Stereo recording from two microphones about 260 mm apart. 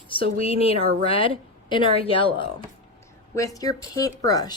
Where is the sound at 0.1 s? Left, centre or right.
Left.